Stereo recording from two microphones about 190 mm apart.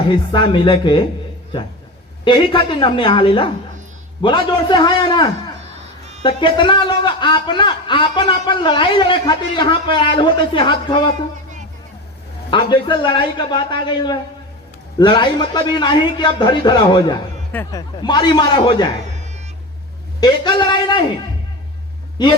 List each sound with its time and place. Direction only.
0.1 s a man's voice: 25° left (ahead or behind)
2.2 s a man's voice: 25° left (ahead or behind)
12.5 s a man's voice: 25° left (ahead or behind)
20.1 s a man's voice: 20° left (ahead or behind)
22.2 s a man's voice: 20° left (ahead or behind)